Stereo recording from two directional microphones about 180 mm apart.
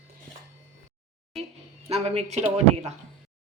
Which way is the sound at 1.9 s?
35° right (ahead or behind).